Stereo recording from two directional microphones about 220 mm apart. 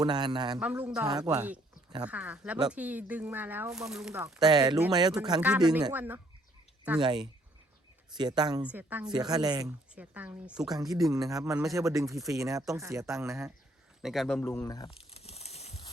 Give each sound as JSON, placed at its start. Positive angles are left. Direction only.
{"t": 0.0, "sound": "a man's voice", "side_deg": -20}
{"t": 0.6, "sound": "a man's voice", "side_deg": -5}
{"t": 5.4, "sound": "speech", "side_deg": -5}
{"t": 7.0, "sound": "a man's voice", "side_deg": -20}
{"t": 8.6, "sound": "speech", "side_deg": -5}
{"t": 9.0, "sound": "speech", "side_deg": -20}
{"t": 9.9, "sound": "speech", "side_deg": -5}
{"t": 10.7, "sound": "speech", "side_deg": -15}
{"t": 14.0, "sound": "a sound", "side_deg": 0}